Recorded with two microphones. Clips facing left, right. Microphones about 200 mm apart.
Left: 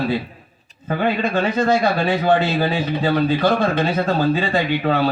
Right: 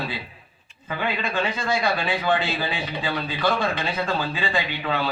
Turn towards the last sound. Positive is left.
turn(degrees=45)  # may be behind; listen again after turning